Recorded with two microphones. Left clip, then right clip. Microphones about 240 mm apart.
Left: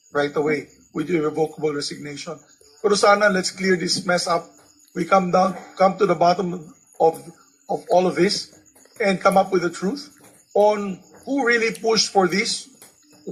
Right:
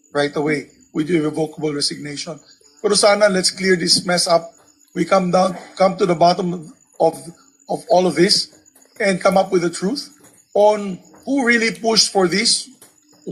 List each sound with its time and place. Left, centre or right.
0.1 s speech: right